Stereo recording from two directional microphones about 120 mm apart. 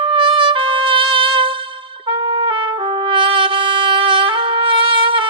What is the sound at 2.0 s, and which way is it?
Trumpet, 45° right (ahead or behind).